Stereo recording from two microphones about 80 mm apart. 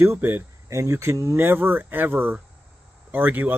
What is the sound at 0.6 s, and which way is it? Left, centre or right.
Speech, right.